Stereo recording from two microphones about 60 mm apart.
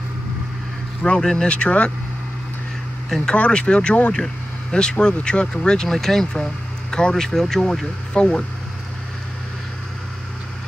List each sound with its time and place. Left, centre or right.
1.0 s speech: centre
3.2 s speech: left
4.1 s speech: centre